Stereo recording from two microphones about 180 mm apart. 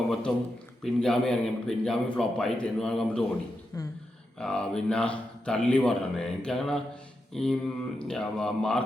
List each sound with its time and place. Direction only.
0.1 s a man's voice: centre (ahead or behind)
3.7 s a woman's voice: 20° left (ahead or behind)
4.4 s a man's voice: 5° left (ahead or behind)